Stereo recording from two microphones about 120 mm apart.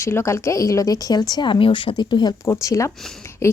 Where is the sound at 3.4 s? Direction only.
20° left (ahead or behind).